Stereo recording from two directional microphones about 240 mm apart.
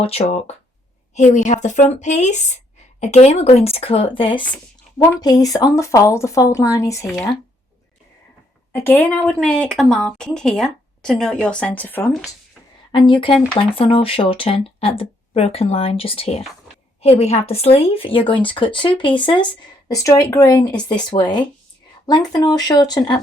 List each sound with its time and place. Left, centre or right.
0.0 s speech: left
8.7 s speech: centre
13.1 s speech: left